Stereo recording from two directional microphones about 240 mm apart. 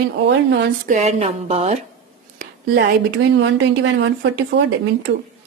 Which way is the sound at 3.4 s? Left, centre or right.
Right.